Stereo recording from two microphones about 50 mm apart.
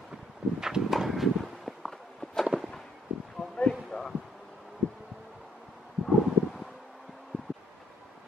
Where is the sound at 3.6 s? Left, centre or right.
Centre.